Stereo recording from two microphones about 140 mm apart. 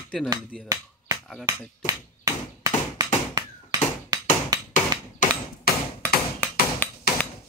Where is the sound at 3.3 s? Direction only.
25° right (ahead or behind).